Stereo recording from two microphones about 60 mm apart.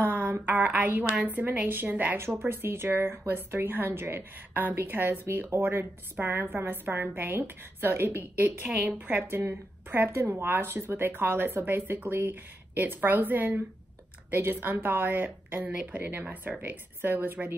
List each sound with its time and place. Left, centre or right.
0.0 s a woman's voice: right
2.1 s a woman's voice: right
8.6 s a woman's voice: centre
8.9 s a woman's voice: right
15.7 s speech: centre
16.0 s a woman's voice: right